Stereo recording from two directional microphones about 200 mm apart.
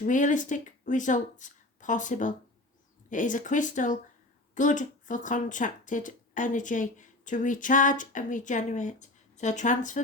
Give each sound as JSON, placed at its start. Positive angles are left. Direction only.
{"t": 0.0, "sound": "speech", "side_deg": 40}